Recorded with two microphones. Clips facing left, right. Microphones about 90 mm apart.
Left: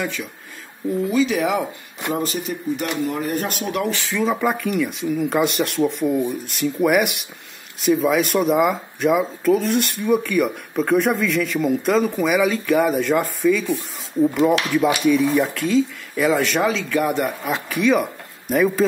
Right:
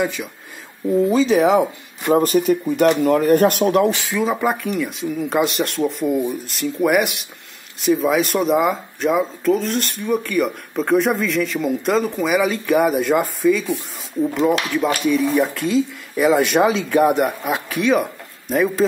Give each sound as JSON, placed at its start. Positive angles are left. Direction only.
{"t": 0.0, "sound": "speech", "side_deg": -15}
{"t": 1.1, "sound": "speech", "side_deg": -30}
{"t": 2.1, "sound": "speech", "side_deg": -55}
{"t": 4.1, "sound": "speech", "side_deg": -5}
{"t": 16.3, "sound": "speech", "side_deg": -20}
{"t": 17.5, "sound": "speech", "side_deg": 0}